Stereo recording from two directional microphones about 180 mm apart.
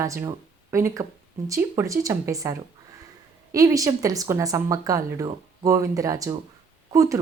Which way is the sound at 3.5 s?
20° right (ahead or behind).